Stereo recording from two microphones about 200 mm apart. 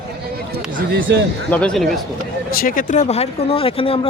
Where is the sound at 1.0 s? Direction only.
60° right (ahead or behind).